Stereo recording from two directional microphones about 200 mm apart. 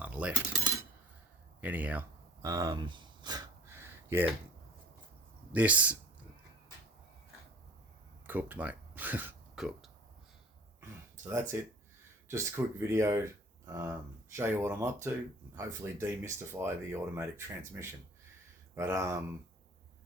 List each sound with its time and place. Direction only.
0.0 s cutlery: 5° right (ahead or behind)
0.6 s a sound: 15° right (ahead or behind)
5.5 s speech: 5° right (ahead or behind)
8.3 s speech: 10° right (ahead or behind)
10.8 s a sound: 15° right (ahead or behind)
12.3 s speech: 15° right (ahead or behind)
18.7 s speech: 15° right (ahead or behind)